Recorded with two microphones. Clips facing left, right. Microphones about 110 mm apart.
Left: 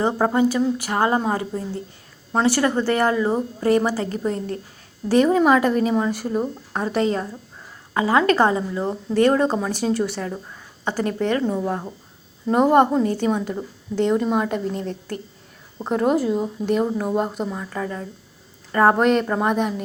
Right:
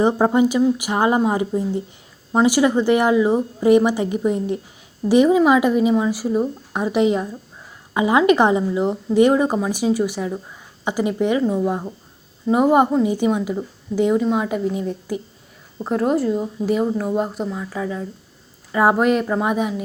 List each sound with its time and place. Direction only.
0.0 s speech: 15° right (ahead or behind)